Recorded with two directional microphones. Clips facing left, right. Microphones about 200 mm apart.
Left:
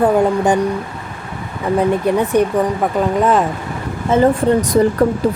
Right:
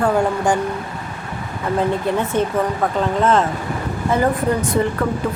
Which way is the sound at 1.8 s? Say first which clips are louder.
Left 4 dB; 15° left (ahead or behind).